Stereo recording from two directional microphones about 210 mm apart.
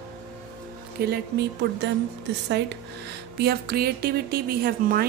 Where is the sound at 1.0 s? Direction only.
50° right (ahead or behind).